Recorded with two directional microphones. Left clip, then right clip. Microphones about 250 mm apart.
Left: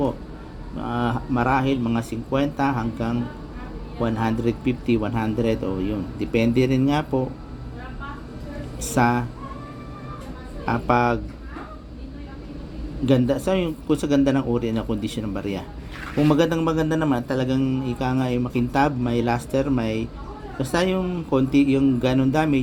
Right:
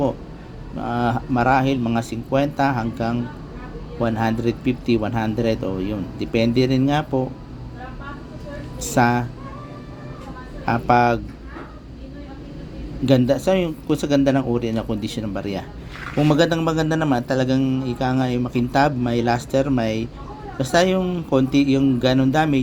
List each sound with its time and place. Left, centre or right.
0.8 s a man's voice: centre
8.8 s a man's voice: centre
10.7 s a man's voice: centre
13.1 s a man's voice: centre